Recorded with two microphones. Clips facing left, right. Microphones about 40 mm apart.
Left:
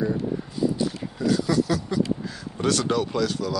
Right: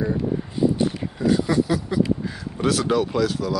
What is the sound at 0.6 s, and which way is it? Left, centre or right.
Speech, right.